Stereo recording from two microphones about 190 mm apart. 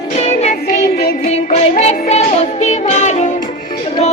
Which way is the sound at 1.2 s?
35° left (ahead or behind).